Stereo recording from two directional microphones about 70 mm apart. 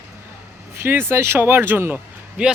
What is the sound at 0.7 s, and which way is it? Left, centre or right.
Speech, right.